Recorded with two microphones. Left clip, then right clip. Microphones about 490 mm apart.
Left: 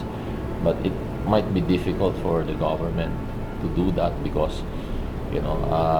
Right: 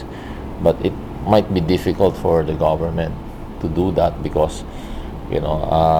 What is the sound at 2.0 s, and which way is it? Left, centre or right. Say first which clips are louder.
Speech: right 8 dB; right.